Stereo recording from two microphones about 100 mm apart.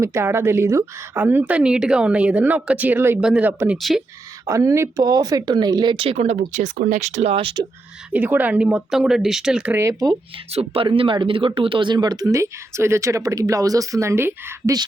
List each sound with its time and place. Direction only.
0.0 s a woman's voice: 25° right (ahead or behind)
3.2 s a woman's voice: 10° right (ahead or behind)
3.8 s speech: centre (ahead or behind)
4.4 s speech: 30° right (ahead or behind)
5.0 s speech: 40° right (ahead or behind)
6.0 s speech: 80° right
8.1 s a woman's voice: 15° right (ahead or behind)
10.5 s speech: 85° right
10.8 s speech: 60° right (ahead or behind); by 14.5 s 25° right (ahead or behind)
14.7 s speech: 35° right (ahead or behind)